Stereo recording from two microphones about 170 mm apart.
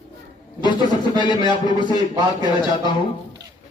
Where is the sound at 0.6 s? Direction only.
25° left (ahead or behind).